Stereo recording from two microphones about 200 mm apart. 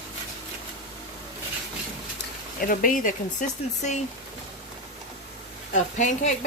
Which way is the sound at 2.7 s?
40° left (ahead or behind).